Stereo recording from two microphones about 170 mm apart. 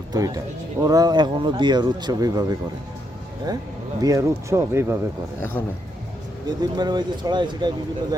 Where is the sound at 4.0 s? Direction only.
20° right (ahead or behind).